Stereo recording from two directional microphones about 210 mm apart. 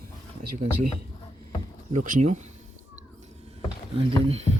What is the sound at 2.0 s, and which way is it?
Speech, 35° right (ahead or behind).